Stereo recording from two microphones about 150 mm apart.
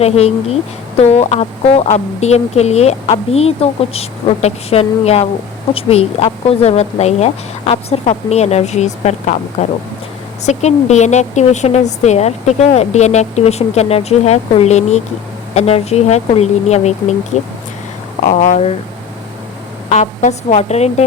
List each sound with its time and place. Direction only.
0.0 s speech: 45° left (ahead or behind)
18.2 s speech: 50° left (ahead or behind)
19.9 s speech: 50° left (ahead or behind)